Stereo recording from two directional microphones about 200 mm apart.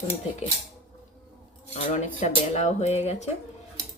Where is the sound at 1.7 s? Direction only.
35° left (ahead or behind).